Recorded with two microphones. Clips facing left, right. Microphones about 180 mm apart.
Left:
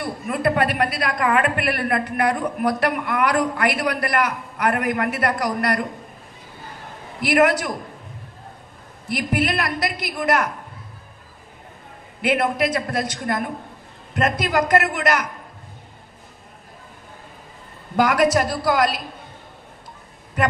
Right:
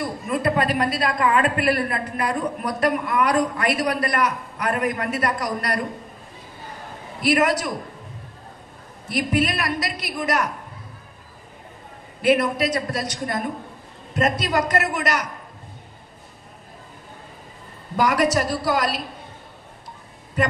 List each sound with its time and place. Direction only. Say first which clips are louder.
0.0 s a woman's voice: left 1 dB; 65° left (ahead or behind)
7.2 s a woman's voice: left 2 dB; 60° left (ahead or behind)
9.1 s a woman's voice: even; 60° left (ahead or behind)
12.3 s a woman's voice: right 1 dB; 55° left (ahead or behind)
17.9 s a woman's voice: left 2 dB; 55° left (ahead or behind)